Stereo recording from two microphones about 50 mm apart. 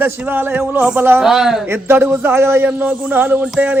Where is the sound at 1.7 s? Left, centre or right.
Right.